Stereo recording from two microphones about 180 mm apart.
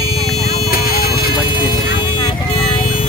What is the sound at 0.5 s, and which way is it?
Vehicle, 55° left (ahead or behind).